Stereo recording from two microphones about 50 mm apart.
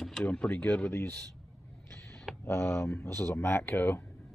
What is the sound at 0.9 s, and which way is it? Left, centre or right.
Speech, left.